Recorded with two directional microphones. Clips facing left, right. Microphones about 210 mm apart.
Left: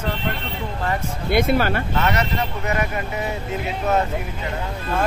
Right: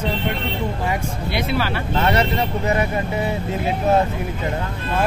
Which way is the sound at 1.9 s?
30° right (ahead or behind).